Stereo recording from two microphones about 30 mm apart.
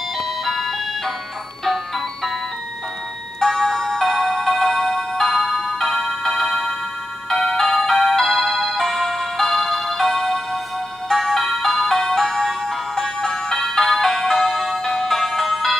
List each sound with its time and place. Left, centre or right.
0.5 s music: centre
3.3 s music: centre